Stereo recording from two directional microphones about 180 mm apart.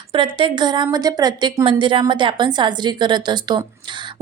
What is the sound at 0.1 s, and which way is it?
Speech, 30° right (ahead or behind).